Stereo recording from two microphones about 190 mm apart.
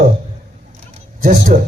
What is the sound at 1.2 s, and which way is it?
Speech, 50° right (ahead or behind).